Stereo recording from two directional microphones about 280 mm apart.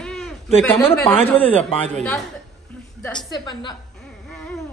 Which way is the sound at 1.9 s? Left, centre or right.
Centre.